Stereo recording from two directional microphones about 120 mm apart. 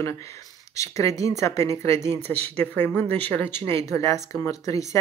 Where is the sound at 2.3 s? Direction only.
10° left (ahead or behind).